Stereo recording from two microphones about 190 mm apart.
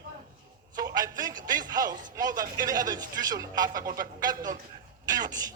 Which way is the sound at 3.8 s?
45° right (ahead or behind).